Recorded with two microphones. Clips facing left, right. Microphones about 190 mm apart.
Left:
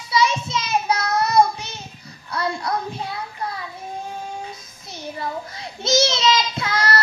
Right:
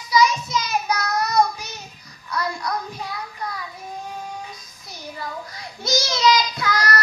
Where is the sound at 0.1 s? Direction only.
25° left (ahead or behind).